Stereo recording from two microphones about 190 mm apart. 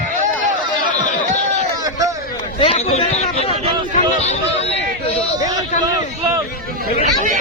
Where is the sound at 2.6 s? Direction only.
30° left (ahead or behind).